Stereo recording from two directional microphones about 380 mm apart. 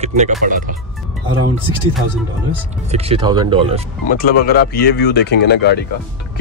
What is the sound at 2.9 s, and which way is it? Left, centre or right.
Speech, centre.